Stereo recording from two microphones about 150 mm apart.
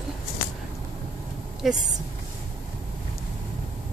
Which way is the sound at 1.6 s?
Centre (ahead or behind).